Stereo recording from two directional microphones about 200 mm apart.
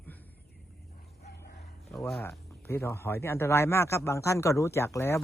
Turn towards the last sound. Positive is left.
turn(degrees=15)  # may be behind; listen again after turning